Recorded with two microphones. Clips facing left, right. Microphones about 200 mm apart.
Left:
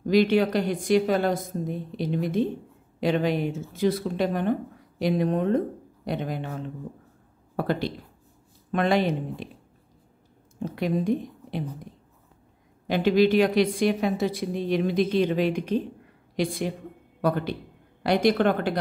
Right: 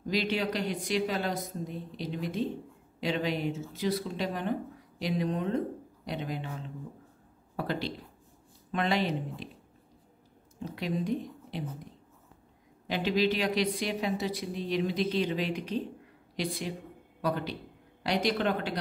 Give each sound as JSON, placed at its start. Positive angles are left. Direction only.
{"t": 0.0, "sound": "a woman's voice", "side_deg": 55}
{"t": 10.6, "sound": "a woman's voice", "side_deg": 50}
{"t": 12.8, "sound": "a woman's voice", "side_deg": 50}